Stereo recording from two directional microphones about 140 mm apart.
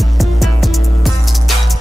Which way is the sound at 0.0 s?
Centre (ahead or behind).